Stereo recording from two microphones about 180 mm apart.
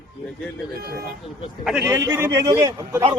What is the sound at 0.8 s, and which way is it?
Speech, 55° right (ahead or behind).